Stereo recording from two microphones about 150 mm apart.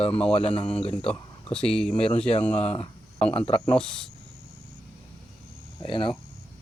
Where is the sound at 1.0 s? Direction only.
40° left (ahead or behind).